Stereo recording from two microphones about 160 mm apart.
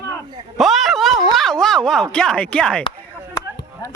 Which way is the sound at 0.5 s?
Centre (ahead or behind).